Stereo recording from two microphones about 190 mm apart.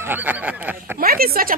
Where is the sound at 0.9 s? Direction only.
50° right (ahead or behind).